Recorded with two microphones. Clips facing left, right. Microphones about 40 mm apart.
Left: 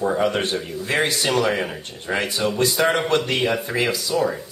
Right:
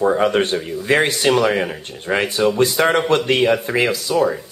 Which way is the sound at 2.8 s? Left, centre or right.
Centre.